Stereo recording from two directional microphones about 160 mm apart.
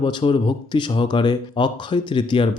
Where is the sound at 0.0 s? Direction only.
30° left (ahead or behind).